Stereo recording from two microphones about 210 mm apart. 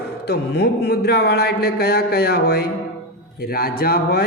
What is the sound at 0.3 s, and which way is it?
Speech, 50° left (ahead or behind).